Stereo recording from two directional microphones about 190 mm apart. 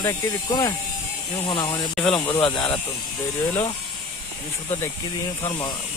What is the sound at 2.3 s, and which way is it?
Speech, 25° left (ahead or behind).